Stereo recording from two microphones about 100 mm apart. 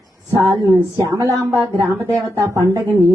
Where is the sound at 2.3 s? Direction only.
35° right (ahead or behind).